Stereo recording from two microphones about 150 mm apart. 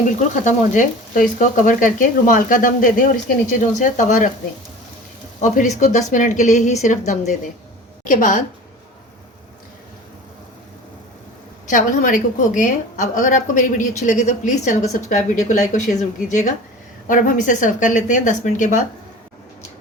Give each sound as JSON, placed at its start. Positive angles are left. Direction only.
{"t": 0.3, "sound": "a woman's voice", "side_deg": 60}
{"t": 5.4, "sound": "a woman's voice", "side_deg": 50}
{"t": 11.7, "sound": "a woman's voice", "side_deg": 60}